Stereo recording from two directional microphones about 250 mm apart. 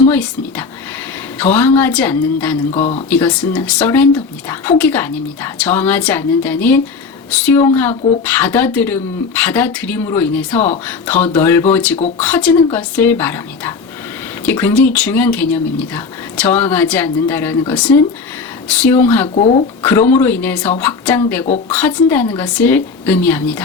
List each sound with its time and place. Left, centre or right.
0.1 s speech: centre
2.7 s speech: left
3.1 s speech: centre